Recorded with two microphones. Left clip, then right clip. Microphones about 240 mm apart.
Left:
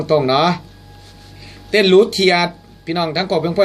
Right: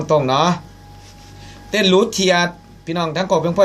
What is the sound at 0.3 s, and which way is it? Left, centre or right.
Speech, centre.